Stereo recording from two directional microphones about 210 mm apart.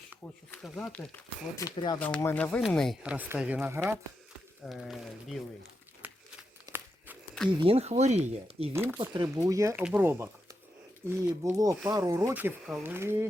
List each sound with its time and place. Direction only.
0.5 s speech: 5° left (ahead or behind)
1.7 s speech: 20° left (ahead or behind)
2.0 s speech: 5° left (ahead or behind)
6.0 s a sound: 10° right (ahead or behind)
6.7 s walk: 10° right (ahead or behind)
7.6 s speech: 30° right (ahead or behind)
8.7 s speech: 10° right (ahead or behind)